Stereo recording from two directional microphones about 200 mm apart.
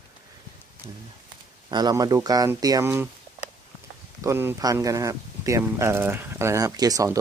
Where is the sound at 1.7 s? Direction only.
20° right (ahead or behind).